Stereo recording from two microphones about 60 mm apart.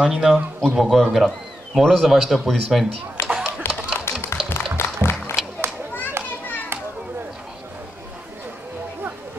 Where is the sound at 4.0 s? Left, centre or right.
Left.